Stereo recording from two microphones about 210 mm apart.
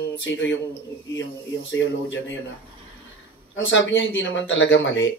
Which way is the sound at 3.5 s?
65° left (ahead or behind).